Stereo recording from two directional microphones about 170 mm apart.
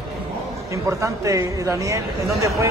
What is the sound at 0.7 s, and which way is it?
A man's voice, 20° right (ahead or behind).